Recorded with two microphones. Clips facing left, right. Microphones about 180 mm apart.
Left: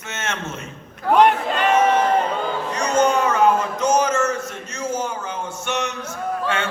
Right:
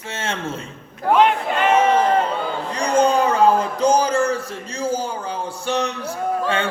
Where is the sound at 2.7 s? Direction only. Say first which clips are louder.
Right 2 dB; 30° right (ahead or behind).